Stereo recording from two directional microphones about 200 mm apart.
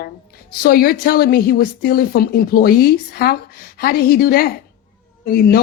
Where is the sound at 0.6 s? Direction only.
45° left (ahead or behind).